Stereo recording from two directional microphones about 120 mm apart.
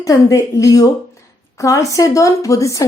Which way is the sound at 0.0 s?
30° left (ahead or behind).